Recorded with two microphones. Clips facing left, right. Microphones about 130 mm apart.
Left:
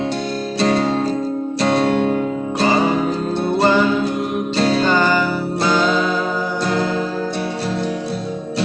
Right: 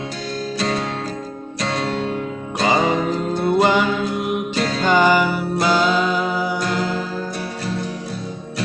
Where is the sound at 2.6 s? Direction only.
15° right (ahead or behind).